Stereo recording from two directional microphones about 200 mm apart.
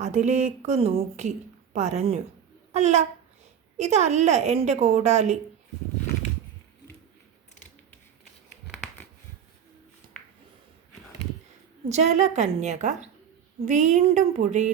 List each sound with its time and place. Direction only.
0.0 s a woman's voice: 35° right (ahead or behind)
11.9 s a woman's voice: 35° right (ahead or behind)